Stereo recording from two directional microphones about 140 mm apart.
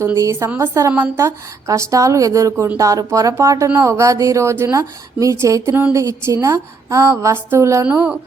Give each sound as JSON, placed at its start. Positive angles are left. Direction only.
{"t": 0.0, "sound": "a woman's voice", "side_deg": -20}
{"t": 7.9, "sound": "speech", "side_deg": -10}